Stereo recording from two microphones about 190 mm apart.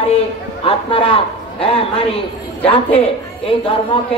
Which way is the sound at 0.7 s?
30° left (ahead or behind).